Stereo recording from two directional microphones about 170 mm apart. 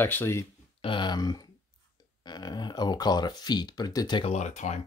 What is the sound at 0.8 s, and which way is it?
Speech, 30° left (ahead or behind).